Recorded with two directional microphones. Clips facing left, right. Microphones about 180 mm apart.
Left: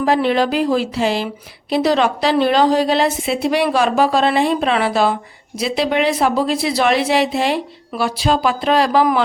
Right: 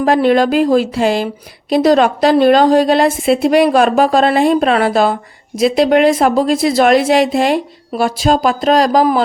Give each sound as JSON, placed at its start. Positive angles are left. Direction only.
{"t": 0.0, "sound": "a woman's voice", "side_deg": -50}